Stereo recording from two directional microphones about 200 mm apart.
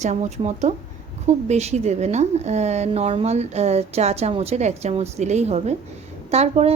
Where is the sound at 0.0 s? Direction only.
35° right (ahead or behind).